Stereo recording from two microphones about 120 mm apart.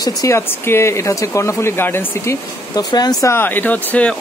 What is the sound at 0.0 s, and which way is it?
Speech, 25° left (ahead or behind).